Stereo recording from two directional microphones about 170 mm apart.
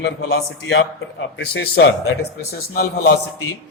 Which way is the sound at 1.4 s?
80° left.